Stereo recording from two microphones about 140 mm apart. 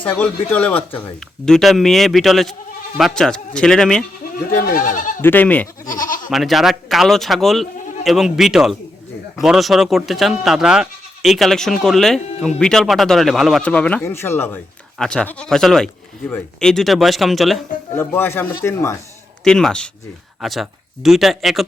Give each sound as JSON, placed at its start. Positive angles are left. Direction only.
{"t": 0.0, "sound": "speech", "side_deg": 10}
{"t": 4.6, "sound": "speech", "side_deg": 75}
{"t": 5.2, "sound": "speech", "side_deg": 15}
{"t": 5.9, "sound": "goat", "side_deg": 75}
{"t": 6.3, "sound": "speech", "side_deg": 0}
{"t": 14.9, "sound": "speech", "side_deg": 5}
{"t": 17.9, "sound": "speech", "side_deg": 15}
{"t": 19.5, "sound": "speech", "side_deg": 5}